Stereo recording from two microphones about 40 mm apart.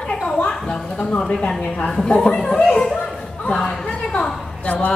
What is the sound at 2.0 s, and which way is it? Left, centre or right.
Speech, centre.